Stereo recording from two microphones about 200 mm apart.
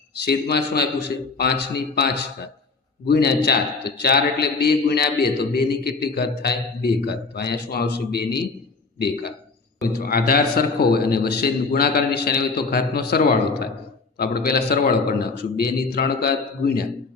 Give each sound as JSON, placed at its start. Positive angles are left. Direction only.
{"t": 0.2, "sound": "a man's voice", "side_deg": 55}